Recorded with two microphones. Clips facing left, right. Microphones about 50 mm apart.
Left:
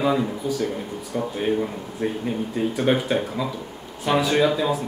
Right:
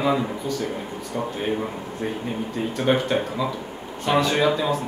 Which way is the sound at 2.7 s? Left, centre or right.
Centre.